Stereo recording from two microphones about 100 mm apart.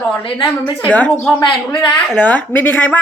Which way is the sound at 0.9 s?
15° left (ahead or behind).